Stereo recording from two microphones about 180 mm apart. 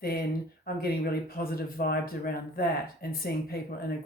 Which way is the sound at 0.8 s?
55° left (ahead or behind).